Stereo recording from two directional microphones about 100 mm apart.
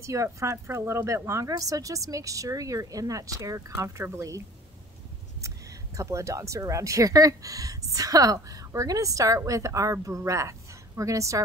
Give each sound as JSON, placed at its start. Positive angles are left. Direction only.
{"t": 0.0, "sound": "speech", "side_deg": -30}
{"t": 5.4, "sound": "speech", "side_deg": -30}